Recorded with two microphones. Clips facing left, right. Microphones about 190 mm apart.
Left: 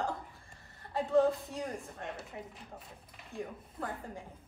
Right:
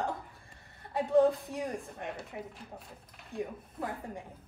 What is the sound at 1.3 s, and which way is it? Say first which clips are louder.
Speech: right 2 dB; centre (ahead or behind).